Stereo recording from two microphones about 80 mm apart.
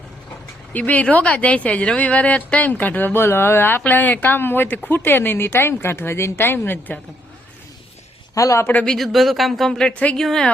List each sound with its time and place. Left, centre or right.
0.7 s speech: centre
8.4 s a man's voice: left
8.8 s speech: centre
10.2 s a woman's voice: centre